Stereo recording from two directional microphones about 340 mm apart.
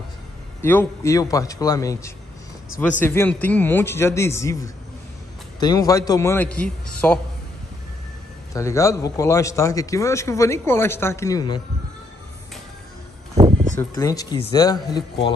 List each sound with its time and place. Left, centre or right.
0.6 s a man's voice: centre
5.6 s a man's voice: centre
8.5 s a man's voice: centre
13.3 s a sound: centre
13.7 s a man's voice: centre